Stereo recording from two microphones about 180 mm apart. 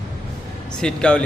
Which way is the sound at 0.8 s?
5° left (ahead or behind).